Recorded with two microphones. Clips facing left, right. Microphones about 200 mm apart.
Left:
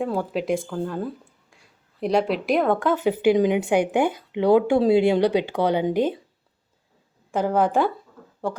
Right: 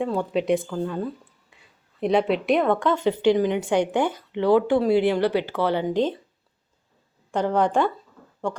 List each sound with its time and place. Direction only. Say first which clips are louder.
0.0 s speech: right 1 dB; centre (ahead or behind)
7.3 s speech: left 1 dB; 5° left (ahead or behind)